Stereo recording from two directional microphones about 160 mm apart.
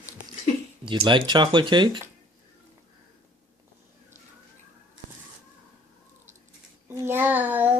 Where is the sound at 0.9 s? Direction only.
30° right (ahead or behind).